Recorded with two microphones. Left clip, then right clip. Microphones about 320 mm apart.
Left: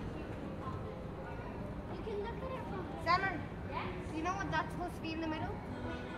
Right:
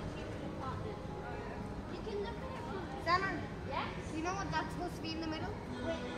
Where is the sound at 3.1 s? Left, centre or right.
Left.